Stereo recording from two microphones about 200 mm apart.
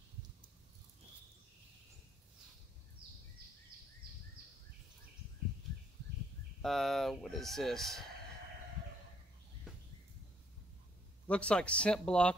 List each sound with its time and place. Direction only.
6.6 s speech: centre (ahead or behind)
11.2 s speech: 5° left (ahead or behind)